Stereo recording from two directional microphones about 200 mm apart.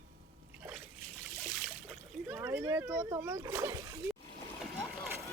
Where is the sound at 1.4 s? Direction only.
Centre (ahead or behind).